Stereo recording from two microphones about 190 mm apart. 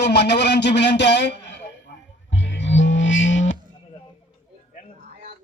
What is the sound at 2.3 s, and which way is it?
Music, 70° left (ahead or behind).